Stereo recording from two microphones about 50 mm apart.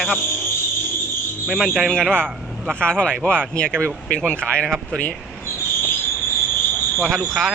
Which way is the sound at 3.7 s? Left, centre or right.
Right.